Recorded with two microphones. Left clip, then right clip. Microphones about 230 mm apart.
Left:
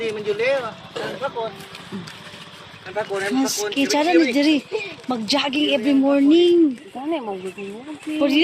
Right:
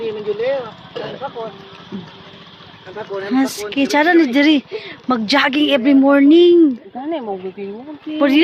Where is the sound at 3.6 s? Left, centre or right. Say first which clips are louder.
Right 6 dB; centre.